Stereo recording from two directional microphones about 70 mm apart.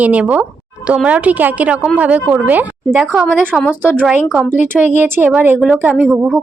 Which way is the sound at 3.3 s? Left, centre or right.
Centre.